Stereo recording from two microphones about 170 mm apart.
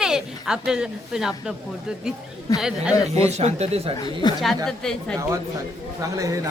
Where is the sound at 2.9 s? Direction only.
20° left (ahead or behind).